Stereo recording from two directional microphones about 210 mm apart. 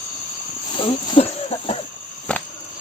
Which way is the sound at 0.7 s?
25° left (ahead or behind).